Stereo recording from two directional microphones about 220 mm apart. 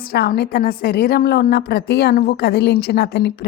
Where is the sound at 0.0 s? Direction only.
45° left (ahead or behind).